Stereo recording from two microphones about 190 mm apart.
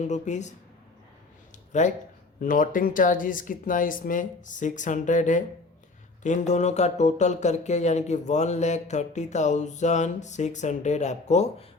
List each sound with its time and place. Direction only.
0.0 s speech: 40° left (ahead or behind)
1.7 s speech: 40° left (ahead or behind)